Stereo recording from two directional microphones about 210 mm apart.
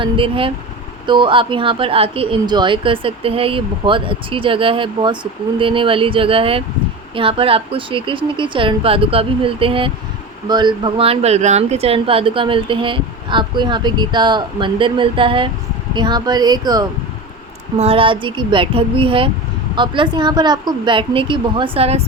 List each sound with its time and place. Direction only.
0.0 s speech: 25° right (ahead or behind)